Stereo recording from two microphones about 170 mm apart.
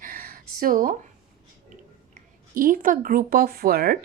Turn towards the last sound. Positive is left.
turn(degrees=-60)  # may be behind; listen again after turning